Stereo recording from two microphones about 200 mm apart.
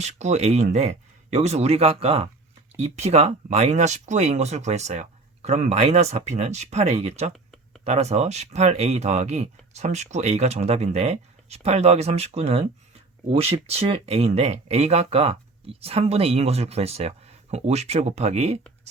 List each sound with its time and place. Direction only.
0.0 s speech: 35° right (ahead or behind)